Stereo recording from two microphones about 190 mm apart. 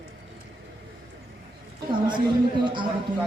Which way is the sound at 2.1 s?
25° right (ahead or behind).